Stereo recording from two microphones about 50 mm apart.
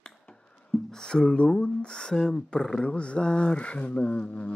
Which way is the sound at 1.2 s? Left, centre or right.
Left.